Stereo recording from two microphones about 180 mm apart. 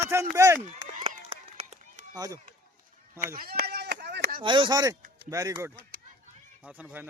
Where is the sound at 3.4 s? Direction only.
60° right (ahead or behind).